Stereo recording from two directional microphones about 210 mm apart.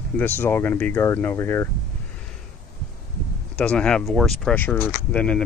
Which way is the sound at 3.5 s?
5° left (ahead or behind).